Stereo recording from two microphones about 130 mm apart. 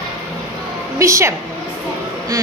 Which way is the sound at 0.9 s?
20° right (ahead or behind).